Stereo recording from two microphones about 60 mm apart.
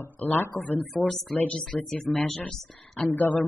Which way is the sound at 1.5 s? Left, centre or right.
Centre.